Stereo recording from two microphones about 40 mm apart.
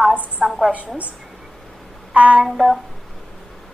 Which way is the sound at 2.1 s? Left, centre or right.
Right.